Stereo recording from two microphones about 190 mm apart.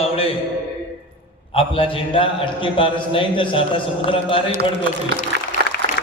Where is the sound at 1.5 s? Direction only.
30° left (ahead or behind).